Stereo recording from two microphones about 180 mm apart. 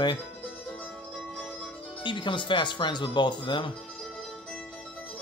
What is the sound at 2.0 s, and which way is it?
Speech, 25° left (ahead or behind).